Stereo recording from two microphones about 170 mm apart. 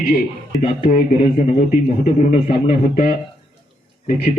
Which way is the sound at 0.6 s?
45° left (ahead or behind).